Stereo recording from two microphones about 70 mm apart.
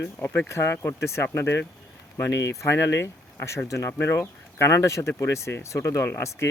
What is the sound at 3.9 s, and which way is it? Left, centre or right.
Speech, left.